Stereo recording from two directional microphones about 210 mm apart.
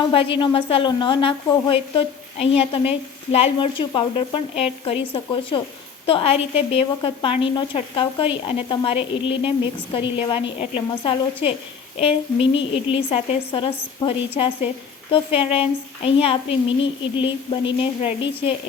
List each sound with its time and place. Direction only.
0.1 s a woman's voice: 25° left (ahead or behind)